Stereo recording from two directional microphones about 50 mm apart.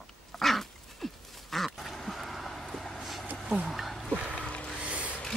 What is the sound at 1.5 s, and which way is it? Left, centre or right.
Duck, centre.